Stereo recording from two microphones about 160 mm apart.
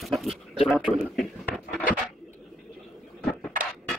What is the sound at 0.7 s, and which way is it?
Speech, centre (ahead or behind).